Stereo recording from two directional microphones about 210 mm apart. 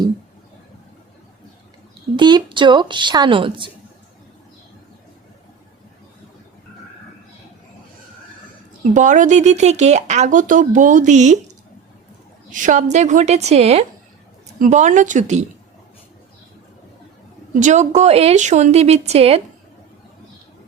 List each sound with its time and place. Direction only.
2.1 s a woman's voice: 20° right (ahead or behind)
8.8 s speech: 35° right (ahead or behind)
12.5 s speech: 40° right (ahead or behind)
17.6 s speech: 35° right (ahead or behind)